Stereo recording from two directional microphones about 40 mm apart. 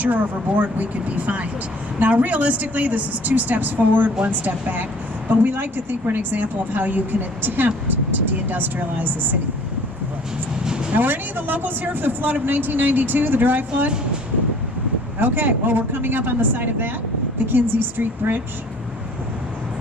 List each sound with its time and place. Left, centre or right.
0.0 s a woman's voice: right
10.9 s a woman's voice: right
15.2 s a woman's voice: right